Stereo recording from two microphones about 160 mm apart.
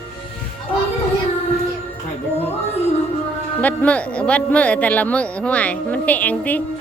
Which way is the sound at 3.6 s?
10° left (ahead or behind).